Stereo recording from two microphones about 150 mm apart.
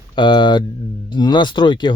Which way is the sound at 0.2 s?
30° left (ahead or behind).